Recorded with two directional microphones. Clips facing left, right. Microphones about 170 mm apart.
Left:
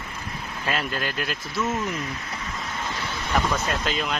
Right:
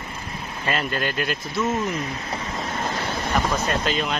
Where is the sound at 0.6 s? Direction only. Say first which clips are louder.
Right 3 dB; centre (ahead or behind).